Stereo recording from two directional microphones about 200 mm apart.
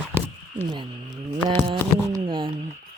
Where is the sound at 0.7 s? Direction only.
20° right (ahead or behind).